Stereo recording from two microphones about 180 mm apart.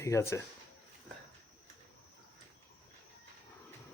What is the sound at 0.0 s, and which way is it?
Speech, 15° left (ahead or behind).